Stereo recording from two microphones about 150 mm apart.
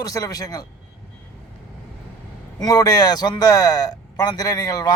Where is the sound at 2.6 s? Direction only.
25° left (ahead or behind).